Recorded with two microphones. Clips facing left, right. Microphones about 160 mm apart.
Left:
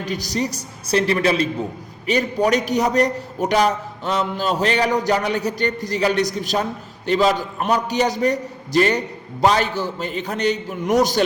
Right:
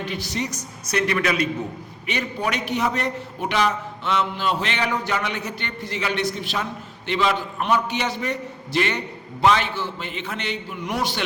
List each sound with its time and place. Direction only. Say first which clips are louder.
0.0 s a man's voice: left 4 dB; 40° left (ahead or behind)